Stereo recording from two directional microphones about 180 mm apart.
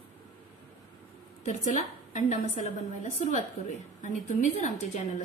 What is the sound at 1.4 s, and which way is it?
A woman's voice, 45° left (ahead or behind).